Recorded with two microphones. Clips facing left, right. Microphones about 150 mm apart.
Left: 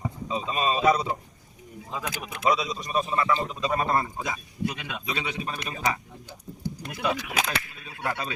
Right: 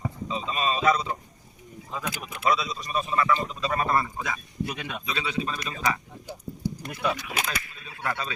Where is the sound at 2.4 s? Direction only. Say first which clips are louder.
Left 1 dB; 20° left (ahead or behind).